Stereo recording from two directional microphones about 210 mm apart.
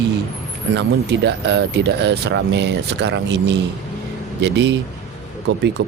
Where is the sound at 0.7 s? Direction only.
55° right (ahead or behind).